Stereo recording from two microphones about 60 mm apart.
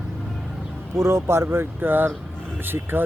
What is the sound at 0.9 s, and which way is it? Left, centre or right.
A man's voice, right.